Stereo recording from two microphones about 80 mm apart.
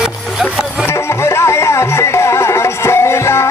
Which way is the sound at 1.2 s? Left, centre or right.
Left.